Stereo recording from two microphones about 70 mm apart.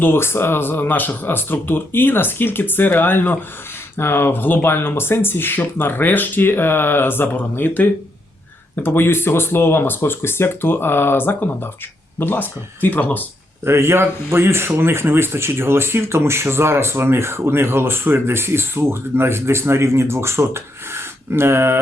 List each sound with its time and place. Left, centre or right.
0.0 s speech: left
13.7 s speech: right